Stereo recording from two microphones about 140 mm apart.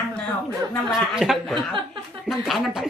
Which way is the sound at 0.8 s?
5° right (ahead or behind).